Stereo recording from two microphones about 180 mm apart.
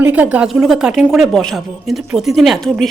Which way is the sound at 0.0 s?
10° right (ahead or behind).